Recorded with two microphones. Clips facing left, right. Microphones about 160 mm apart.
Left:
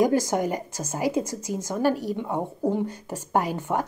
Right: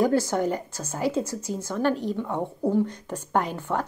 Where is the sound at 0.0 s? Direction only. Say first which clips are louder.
Left 1 dB; 15° left (ahead or behind).